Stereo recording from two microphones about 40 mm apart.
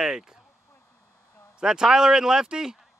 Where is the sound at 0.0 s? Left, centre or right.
Centre.